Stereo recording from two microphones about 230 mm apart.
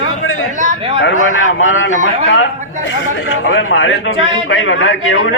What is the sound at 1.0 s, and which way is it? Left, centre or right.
A man's voice, left.